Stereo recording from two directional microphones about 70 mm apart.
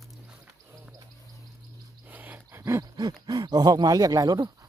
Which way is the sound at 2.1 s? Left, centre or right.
Right.